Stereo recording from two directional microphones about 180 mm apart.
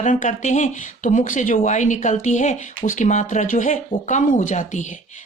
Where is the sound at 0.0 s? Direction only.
45° left (ahead or behind).